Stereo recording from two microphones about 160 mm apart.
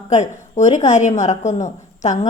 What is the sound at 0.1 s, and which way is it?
A woman's voice, 45° left (ahead or behind).